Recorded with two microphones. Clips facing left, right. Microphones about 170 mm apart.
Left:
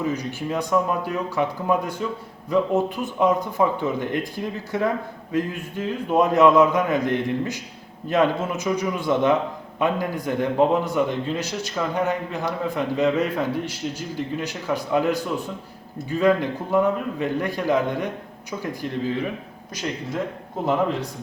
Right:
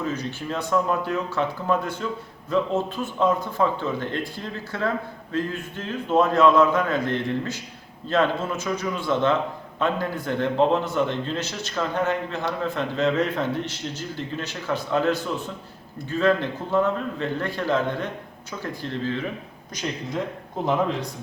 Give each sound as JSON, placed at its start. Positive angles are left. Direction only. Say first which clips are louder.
{"t": 0.0, "sound": "a man's voice", "louder": "left 3 dB", "side_deg": 15}
{"t": 19.8, "sound": "speech", "louder": "left 1 dB", "side_deg": 0}